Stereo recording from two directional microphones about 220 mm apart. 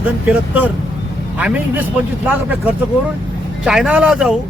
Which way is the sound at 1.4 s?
5° right (ahead or behind).